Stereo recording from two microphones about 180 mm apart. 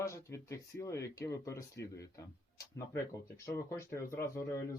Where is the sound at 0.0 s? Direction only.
15° left (ahead or behind).